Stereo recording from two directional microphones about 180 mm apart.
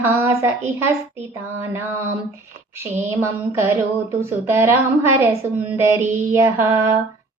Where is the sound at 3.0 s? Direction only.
15° right (ahead or behind).